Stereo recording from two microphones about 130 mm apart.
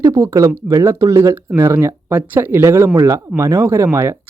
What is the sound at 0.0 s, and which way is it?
Speech, 25° right (ahead or behind).